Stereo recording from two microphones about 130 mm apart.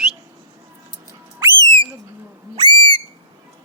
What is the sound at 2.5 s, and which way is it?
Whistle, 35° right (ahead or behind).